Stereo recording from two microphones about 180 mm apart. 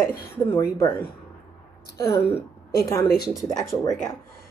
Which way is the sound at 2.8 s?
15° left (ahead or behind).